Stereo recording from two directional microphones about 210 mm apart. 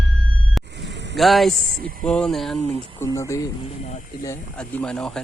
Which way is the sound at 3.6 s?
35° left (ahead or behind).